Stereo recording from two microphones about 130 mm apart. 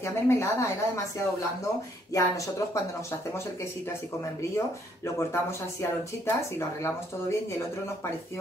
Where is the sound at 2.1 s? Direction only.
25° left (ahead or behind).